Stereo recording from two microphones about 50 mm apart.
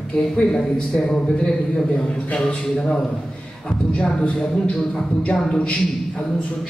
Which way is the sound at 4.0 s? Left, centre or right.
Left.